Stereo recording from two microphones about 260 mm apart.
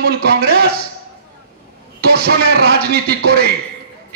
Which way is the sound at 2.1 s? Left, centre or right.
Right.